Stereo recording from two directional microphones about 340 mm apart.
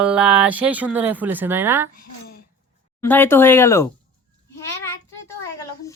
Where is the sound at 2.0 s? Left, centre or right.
Left.